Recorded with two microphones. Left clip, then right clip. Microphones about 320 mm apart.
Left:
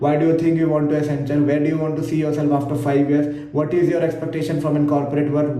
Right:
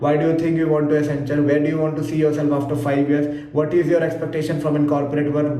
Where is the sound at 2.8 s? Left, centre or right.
Left.